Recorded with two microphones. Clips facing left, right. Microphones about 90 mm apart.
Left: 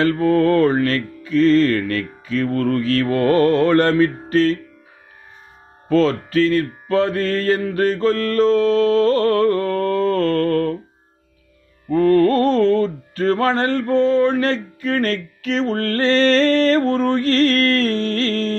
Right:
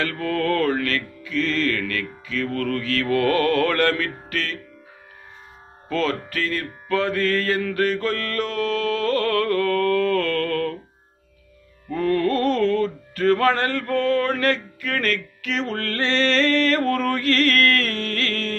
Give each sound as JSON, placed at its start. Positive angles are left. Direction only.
{"t": 0.0, "sound": "music", "side_deg": 30}
{"t": 5.9, "sound": "music", "side_deg": 30}
{"t": 11.9, "sound": "music", "side_deg": 40}